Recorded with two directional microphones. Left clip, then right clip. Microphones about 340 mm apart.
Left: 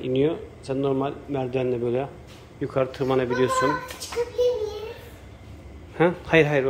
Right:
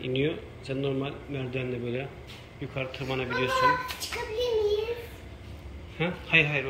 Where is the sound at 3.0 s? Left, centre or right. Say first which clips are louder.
Left 4 dB; left.